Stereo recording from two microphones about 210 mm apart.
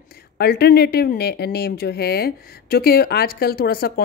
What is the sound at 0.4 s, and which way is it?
Speech, 50° left (ahead or behind).